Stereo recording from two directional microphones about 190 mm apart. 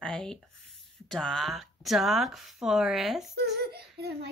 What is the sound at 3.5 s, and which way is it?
Speech, 55° right (ahead or behind).